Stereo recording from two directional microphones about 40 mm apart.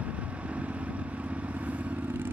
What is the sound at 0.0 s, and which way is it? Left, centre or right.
Vehicle, right.